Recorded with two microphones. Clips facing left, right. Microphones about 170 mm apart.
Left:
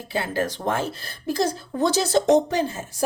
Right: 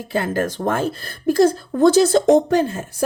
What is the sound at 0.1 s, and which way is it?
A woman's voice, 50° right (ahead or behind).